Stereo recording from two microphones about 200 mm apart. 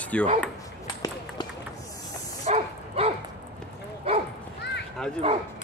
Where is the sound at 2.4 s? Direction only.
35° right (ahead or behind).